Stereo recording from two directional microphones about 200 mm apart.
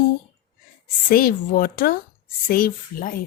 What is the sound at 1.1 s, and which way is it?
Music, 45° left (ahead or behind).